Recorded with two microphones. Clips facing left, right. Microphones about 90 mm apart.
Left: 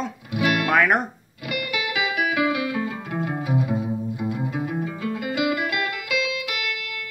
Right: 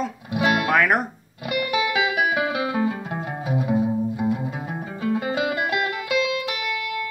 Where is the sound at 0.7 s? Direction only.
Centre (ahead or behind).